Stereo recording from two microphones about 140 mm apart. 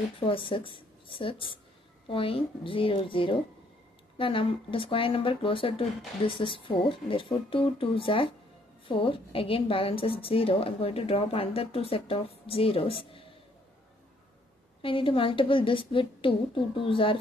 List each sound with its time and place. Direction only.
0.2 s a woman's voice: 40° left (ahead or behind)
14.8 s a woman's voice: 40° left (ahead or behind)